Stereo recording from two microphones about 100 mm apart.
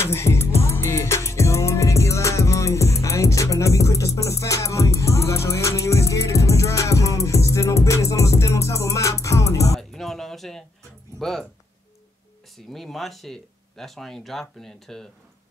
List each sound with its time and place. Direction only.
0.0 s music: 25° left (ahead or behind)
9.8 s music: 5° left (ahead or behind)
12.5 s speech: centre (ahead or behind)